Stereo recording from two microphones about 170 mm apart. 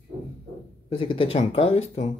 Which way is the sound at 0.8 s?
30° left (ahead or behind).